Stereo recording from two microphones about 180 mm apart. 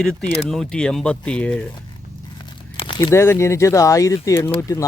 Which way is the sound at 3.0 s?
15° left (ahead or behind).